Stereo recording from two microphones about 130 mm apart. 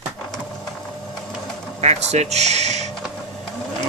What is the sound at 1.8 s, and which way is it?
Speech, 60° right (ahead or behind).